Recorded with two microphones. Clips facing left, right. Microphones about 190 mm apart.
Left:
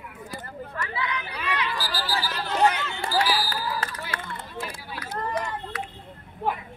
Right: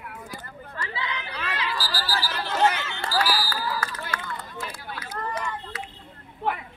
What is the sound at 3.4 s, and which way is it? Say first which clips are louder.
Run: even; 25° left (ahead or behind).